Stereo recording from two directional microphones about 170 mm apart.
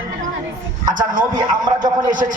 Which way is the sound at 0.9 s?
50° right (ahead or behind).